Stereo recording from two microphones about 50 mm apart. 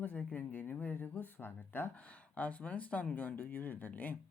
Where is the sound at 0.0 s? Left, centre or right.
Left.